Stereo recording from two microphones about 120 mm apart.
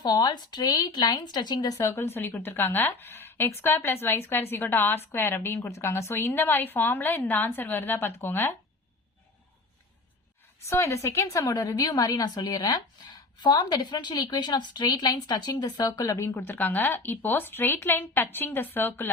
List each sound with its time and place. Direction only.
0.0 s a woman's voice: 35° left (ahead or behind); by 8.5 s 20° left (ahead or behind)
10.7 s a woman's voice: 25° left (ahead or behind)